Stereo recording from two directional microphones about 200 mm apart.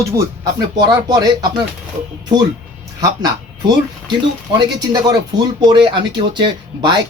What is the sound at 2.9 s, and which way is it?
Speech, 20° right (ahead or behind).